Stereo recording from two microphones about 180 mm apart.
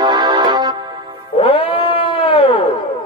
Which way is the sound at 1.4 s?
30° left (ahead or behind).